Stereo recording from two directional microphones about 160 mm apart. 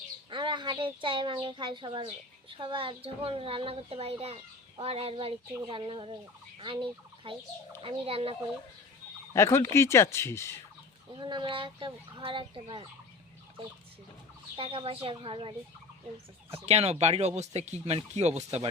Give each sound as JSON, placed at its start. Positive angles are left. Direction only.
{"t": 0.3, "sound": "a woman's voice", "side_deg": -30}
{"t": 6.6, "sound": "fowl", "side_deg": -30}
{"t": 7.8, "sound": "a child's voice", "side_deg": -35}
{"t": 9.3, "sound": "speech", "side_deg": 15}
{"t": 11.1, "sound": "a child's voice", "side_deg": -30}
{"t": 14.5, "sound": "a child's voice", "side_deg": -35}